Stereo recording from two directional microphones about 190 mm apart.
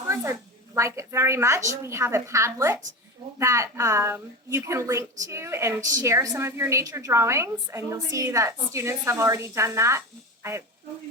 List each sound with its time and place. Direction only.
0.1 s a woman's voice: 15° right (ahead or behind)